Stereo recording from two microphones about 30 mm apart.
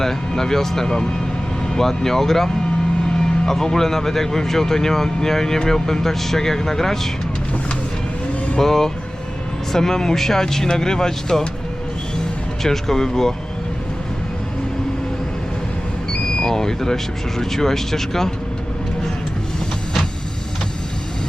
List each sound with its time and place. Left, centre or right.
0.0 s speech: centre
8.5 s speech: centre
12.6 s speech: centre
16.1 s speech: left